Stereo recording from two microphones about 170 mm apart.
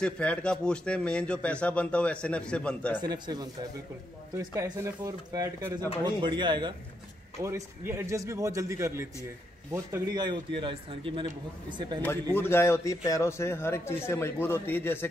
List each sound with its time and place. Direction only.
0.0 s a man's voice: 5° left (ahead or behind)
3.0 s a man's voice: 25° right (ahead or behind)
7.4 s a man's voice: 15° right (ahead or behind); by 11.2 s 30° right (ahead or behind)
12.0 s a man's voice: 15° left (ahead or behind)